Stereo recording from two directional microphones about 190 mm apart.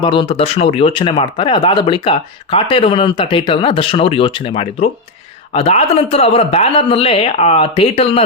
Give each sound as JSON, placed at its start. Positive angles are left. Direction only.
{"t": 0.0, "sound": "speech", "side_deg": 25}